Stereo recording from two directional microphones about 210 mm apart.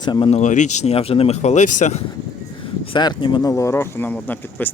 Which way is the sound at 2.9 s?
20° left (ahead or behind).